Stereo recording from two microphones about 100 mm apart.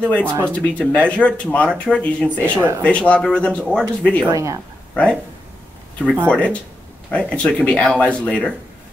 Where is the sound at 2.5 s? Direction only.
30° right (ahead or behind).